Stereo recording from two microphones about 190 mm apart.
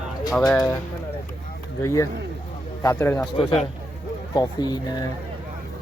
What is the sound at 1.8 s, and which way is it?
Speech, 15° left (ahead or behind).